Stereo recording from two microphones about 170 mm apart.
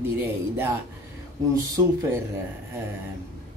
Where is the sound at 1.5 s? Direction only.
20° right (ahead or behind).